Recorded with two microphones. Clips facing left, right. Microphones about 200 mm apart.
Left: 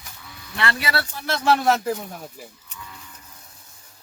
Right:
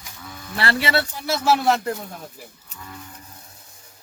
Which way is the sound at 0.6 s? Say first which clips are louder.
Right 3 dB; 25° right (ahead or behind).